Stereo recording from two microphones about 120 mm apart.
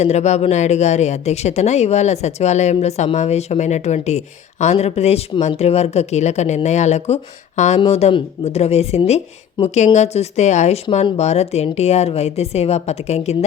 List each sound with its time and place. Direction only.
0.0 s a woman's voice: 70° left (ahead or behind)
7.9 s a woman's voice: 60° left (ahead or behind)